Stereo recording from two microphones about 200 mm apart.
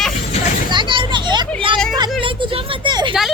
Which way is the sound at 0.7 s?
25° right (ahead or behind).